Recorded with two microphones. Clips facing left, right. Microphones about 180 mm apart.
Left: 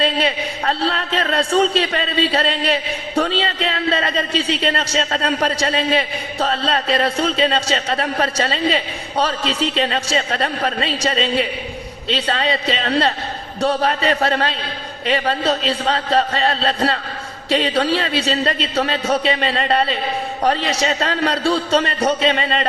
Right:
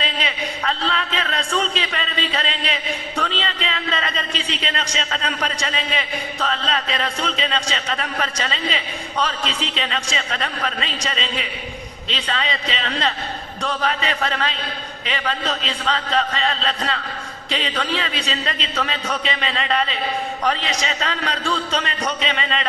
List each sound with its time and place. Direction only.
0.0 s a man's voice: 35° left (ahead or behind)